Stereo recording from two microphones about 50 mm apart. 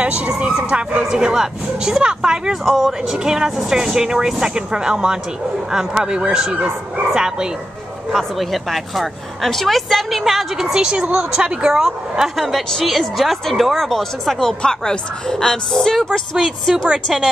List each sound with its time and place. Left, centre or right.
0.0 s speech: right
1.1 s speech: centre
2.7 s speech: centre
3.3 s speech: centre
8.1 s a woman's voice: centre
16.9 s speech: centre